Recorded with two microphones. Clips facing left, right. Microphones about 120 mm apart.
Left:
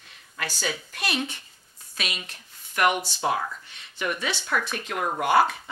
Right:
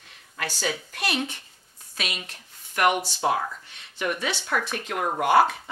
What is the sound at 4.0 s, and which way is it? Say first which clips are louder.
Speech: right 1 dB; 45° right (ahead or behind).